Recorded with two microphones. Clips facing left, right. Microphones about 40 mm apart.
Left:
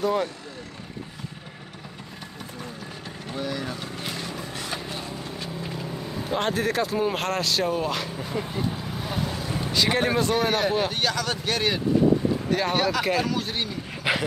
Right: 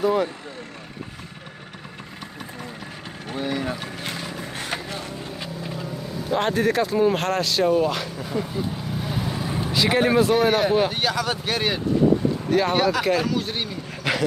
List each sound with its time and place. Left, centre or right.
0.0 s speech: centre
3.3 s vehicle: right
4.4 s a sound: right
6.3 s speech: centre
14.0 s dog: centre